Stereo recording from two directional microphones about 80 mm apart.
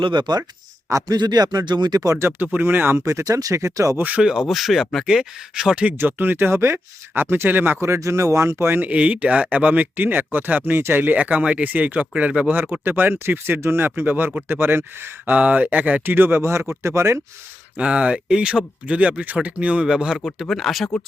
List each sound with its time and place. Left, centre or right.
0.0 s speech: right
0.9 s a man's voice: right
1.1 s speech: right
2.0 s speech: right
2.2 s speech: right
3.0 s speech: right
3.9 s speech: centre
4.2 s speech: centre
6.0 s speech: right
7.8 s speech: right; by 12.5 s centre
12.7 s speech: right
15.4 s speech: centre; by 17.2 s right
17.7 s speech: centre